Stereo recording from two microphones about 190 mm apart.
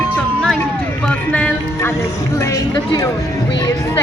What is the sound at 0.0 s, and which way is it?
Music, 5° left (ahead or behind).